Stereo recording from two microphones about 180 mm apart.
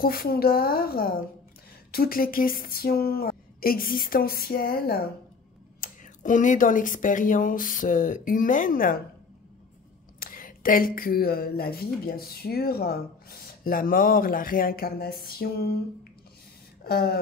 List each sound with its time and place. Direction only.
0.0 s speech: 55° left (ahead or behind)
10.2 s speech: 50° left (ahead or behind)